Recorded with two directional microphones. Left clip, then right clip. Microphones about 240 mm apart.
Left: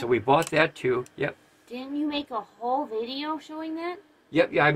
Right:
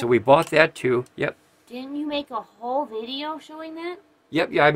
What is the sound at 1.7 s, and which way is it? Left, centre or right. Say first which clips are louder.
A woman's voice: right 1 dB; centre.